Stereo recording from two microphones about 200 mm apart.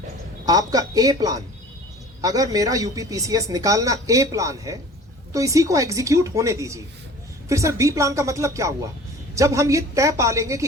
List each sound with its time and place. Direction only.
0.4 s speech: 20° right (ahead or behind)